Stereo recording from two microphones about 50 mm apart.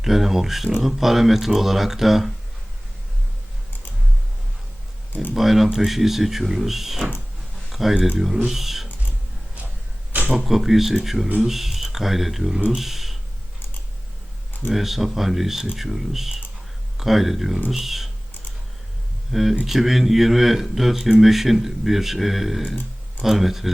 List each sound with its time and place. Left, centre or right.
0.0 s speech: centre
5.3 s speech: centre
7.9 s speech: centre
8.4 s speech: centre
10.4 s speech: centre
14.7 s speech: centre
19.3 s speech: centre